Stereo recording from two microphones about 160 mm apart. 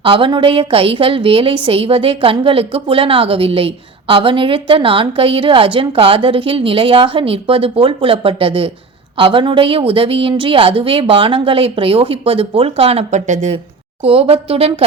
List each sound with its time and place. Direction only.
0.0 s a woman's voice: 35° right (ahead or behind); by 13.6 s 50° right (ahead or behind)
14.0 s a woman's voice: 35° right (ahead or behind)